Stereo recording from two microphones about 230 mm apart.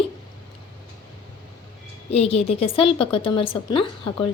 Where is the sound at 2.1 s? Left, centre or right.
Left.